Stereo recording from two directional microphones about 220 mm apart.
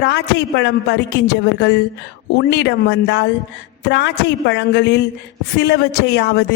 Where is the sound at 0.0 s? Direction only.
50° left (ahead or behind).